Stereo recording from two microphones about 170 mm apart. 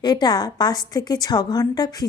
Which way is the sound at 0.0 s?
25° left (ahead or behind).